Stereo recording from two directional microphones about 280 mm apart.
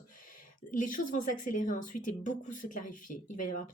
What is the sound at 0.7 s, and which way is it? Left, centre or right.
Speech, left.